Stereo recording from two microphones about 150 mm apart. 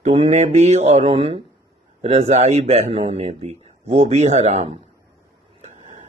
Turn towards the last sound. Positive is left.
turn(degrees=-45)  # may be behind; listen again after turning